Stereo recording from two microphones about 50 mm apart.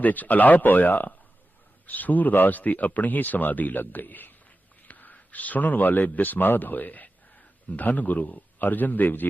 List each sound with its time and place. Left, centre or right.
0.0 s speech: left